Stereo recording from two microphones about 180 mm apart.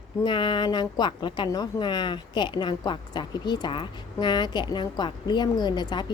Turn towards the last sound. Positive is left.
turn(degrees=25)  # may be behind; listen again after turning